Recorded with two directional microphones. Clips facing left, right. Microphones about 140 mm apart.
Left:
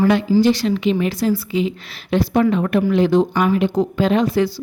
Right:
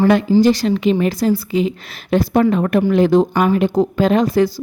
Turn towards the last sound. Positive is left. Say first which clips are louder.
# right 2 dB
turn(degrees=-40)  # may be behind; listen again after turning